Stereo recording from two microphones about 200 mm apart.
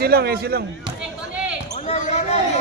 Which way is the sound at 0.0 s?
50° right (ahead or behind).